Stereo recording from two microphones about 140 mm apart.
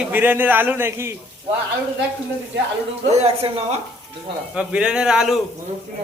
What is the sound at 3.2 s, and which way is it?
Speech, 45° right (ahead or behind).